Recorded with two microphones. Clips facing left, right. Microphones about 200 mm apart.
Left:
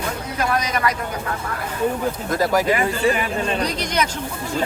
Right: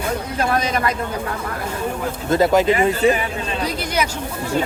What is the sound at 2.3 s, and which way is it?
Speech, 25° right (ahead or behind).